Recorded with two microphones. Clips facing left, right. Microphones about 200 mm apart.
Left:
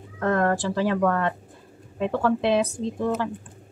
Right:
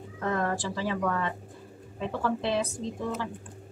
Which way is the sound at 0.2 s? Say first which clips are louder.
Left 7 dB; 60° left (ahead or behind).